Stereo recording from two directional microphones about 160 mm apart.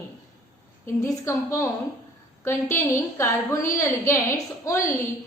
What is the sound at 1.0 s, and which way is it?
A woman's voice, 15° left (ahead or behind).